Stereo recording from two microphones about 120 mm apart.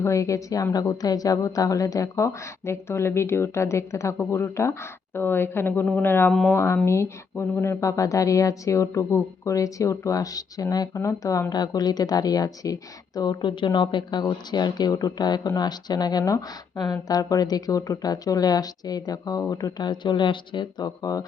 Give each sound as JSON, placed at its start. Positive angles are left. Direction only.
{"t": 0.0, "sound": "a woman's voice", "side_deg": 25}